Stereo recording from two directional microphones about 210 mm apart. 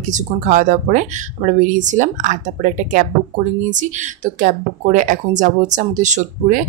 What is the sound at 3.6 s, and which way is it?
Speech, 35° right (ahead or behind).